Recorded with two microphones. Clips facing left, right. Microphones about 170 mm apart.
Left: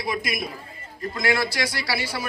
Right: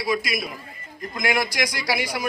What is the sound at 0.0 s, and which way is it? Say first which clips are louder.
Speech: right 3 dB; 55° left (ahead or behind).